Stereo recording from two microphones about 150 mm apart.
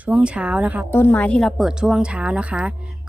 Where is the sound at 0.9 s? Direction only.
15° left (ahead or behind).